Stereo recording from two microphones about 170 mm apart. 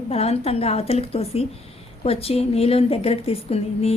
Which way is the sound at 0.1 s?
35° left (ahead or behind).